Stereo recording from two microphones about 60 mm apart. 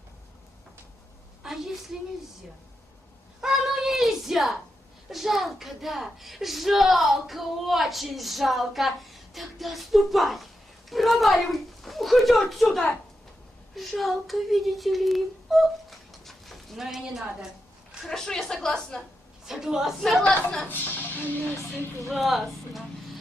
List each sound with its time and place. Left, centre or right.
1.4 s a woman's voice: centre
3.4 s a sound: centre
5.0 s a woman's voice: centre
18.0 s a woman's voice: centre
19.5 s a woman's voice: centre
20.7 s speech: left
22.1 s a woman's voice: centre